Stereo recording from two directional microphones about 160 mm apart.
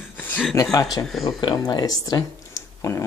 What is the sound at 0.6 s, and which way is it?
Speech, 20° left (ahead or behind).